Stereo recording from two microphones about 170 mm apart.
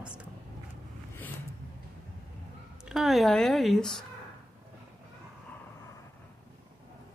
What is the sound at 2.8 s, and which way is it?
Speech, centre (ahead or behind).